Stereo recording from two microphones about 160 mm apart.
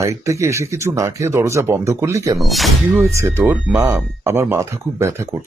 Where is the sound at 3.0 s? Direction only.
15° right (ahead or behind).